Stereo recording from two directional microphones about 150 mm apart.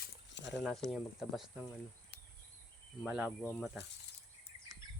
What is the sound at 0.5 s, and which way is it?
Speech, centre (ahead or behind).